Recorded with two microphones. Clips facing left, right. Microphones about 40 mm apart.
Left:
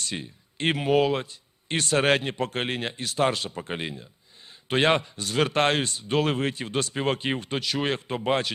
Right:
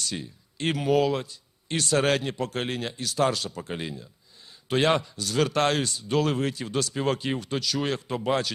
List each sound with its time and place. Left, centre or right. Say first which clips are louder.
0.0 s speech: even; left